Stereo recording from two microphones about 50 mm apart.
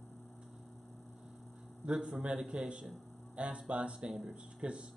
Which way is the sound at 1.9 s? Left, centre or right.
Centre.